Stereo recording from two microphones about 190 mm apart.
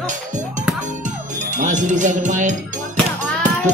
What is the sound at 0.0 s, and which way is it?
Music, 40° right (ahead or behind).